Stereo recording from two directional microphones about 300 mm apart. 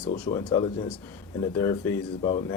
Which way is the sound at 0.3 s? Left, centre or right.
Centre.